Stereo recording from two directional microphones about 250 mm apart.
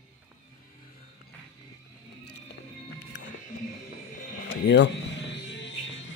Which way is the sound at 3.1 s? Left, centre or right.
Left.